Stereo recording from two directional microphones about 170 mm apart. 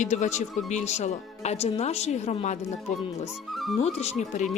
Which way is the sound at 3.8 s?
40° left (ahead or behind).